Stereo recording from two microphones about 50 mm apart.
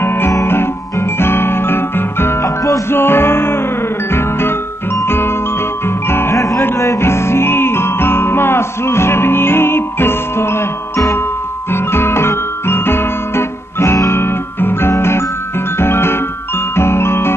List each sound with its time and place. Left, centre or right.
0.0 s music: left
0.5 s guitar: left
2.4 s music: left
2.9 s music: left
6.3 s music: left
6.8 s music: left
11.7 s guitar: left
15.8 s music: left